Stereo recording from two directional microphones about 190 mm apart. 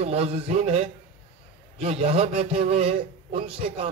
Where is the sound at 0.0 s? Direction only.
35° right (ahead or behind).